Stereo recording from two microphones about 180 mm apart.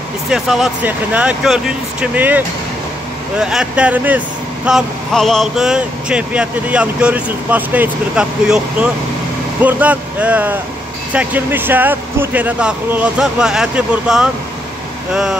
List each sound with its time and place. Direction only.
0.3 s speech: centre (ahead or behind)